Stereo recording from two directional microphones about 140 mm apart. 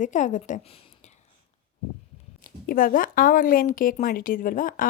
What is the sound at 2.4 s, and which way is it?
Speech, 85° left.